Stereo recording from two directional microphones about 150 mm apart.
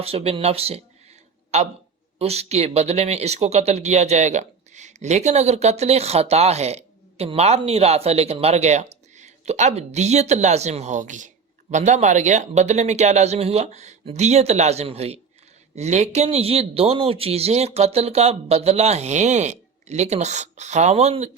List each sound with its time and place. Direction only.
0.0 s speech: 40° right (ahead or behind)